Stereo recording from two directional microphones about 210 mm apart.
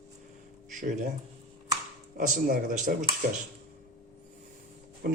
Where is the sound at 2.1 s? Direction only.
40° right (ahead or behind).